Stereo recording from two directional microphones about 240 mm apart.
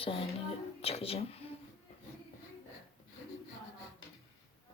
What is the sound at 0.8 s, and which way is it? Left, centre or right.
Speech, left.